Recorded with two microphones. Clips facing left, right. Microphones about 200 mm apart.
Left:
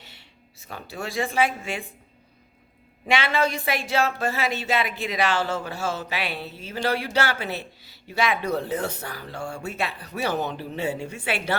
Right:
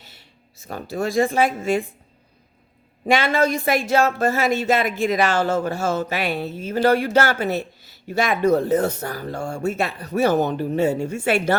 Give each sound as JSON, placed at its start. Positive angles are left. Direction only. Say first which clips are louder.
{"t": 0.0, "sound": "a sound", "louder": "even", "side_deg": -40}
{"t": 0.7, "sound": "speech", "louder": "right 9 dB", "side_deg": -45}
{"t": 3.1, "sound": "speech", "louder": "right 5 dB", "side_deg": -45}